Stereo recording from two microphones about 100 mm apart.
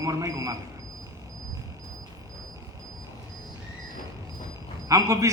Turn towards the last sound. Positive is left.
turn(degrees=-30)  # may be behind; listen again after turning